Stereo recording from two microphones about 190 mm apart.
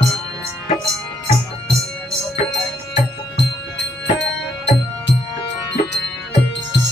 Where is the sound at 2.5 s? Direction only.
70° left (ahead or behind).